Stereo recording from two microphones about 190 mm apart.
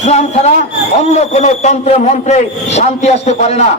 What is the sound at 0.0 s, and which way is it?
A man's voice, 35° left (ahead or behind).